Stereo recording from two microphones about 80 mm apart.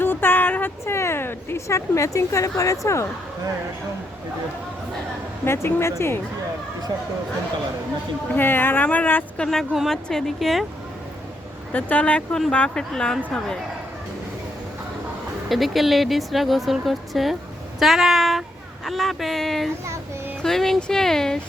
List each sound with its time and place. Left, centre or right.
0.0 s a sound: left
5.5 s speech: left
8.4 s speech: left
9.4 s speech: centre
11.7 s speech: centre
15.4 s speech: centre
17.7 s a sound: centre
18.9 s speech: centre